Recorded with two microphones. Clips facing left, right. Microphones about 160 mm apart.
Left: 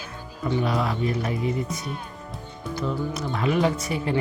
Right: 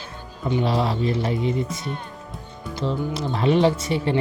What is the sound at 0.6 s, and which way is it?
Speech, 30° right (ahead or behind).